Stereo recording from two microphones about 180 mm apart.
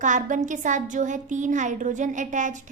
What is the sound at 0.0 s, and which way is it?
A woman's voice, 45° right (ahead or behind).